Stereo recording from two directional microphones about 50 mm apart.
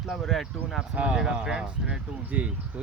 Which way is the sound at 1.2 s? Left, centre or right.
Centre.